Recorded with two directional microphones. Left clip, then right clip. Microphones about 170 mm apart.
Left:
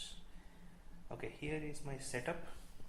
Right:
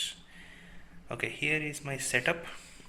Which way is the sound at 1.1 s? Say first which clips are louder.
Right 13 dB; 10° right (ahead or behind).